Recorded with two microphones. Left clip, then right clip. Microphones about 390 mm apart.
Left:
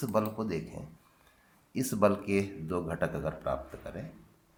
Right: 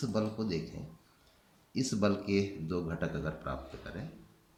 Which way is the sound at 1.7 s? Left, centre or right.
Centre.